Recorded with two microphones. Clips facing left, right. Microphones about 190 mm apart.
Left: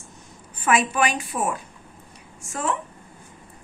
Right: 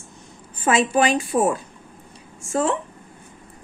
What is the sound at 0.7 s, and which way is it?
Speech, 30° right (ahead or behind).